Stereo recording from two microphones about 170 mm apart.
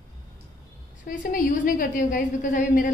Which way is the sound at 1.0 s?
55° left (ahead or behind).